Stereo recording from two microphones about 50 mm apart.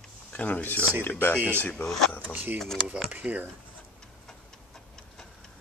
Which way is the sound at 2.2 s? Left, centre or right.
Right.